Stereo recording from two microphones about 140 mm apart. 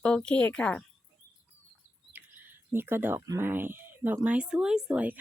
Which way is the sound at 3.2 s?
15° right (ahead or behind).